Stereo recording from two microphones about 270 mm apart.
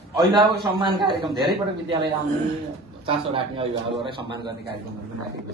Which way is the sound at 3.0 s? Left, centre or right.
Centre.